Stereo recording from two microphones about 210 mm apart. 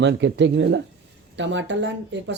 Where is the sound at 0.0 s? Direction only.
55° right (ahead or behind).